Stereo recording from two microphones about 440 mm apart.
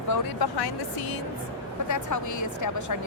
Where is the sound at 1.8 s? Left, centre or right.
Left.